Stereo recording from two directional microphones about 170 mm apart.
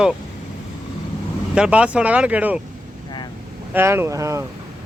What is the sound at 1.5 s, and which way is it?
Speech, 5° right (ahead or behind).